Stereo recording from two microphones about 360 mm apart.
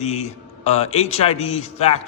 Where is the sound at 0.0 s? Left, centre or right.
Centre.